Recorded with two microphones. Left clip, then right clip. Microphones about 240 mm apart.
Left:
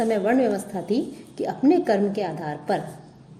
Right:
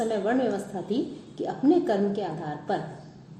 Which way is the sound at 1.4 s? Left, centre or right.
Left.